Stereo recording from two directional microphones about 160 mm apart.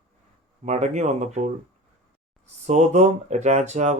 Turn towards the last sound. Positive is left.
turn(degrees=-45)  # may be behind; listen again after turning